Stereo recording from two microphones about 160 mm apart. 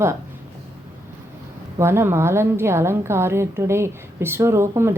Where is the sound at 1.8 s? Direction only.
15° right (ahead or behind).